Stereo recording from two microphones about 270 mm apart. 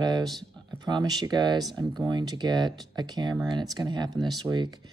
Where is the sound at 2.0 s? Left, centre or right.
Centre.